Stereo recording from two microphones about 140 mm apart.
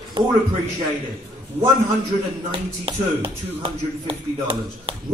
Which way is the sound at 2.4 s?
40° right (ahead or behind).